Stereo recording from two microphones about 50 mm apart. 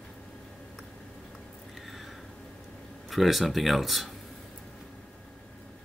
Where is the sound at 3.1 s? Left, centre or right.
Centre.